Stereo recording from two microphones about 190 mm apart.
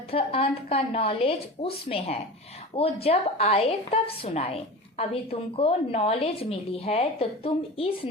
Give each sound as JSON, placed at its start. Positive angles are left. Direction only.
{"t": 0.1, "sound": "a woman's voice", "side_deg": 30}